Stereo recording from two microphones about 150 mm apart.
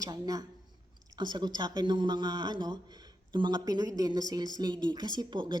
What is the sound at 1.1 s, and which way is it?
A woman's voice, 30° right (ahead or behind).